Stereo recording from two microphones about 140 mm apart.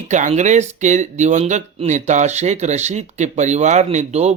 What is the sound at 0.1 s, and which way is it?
Speech, 60° right (ahead or behind).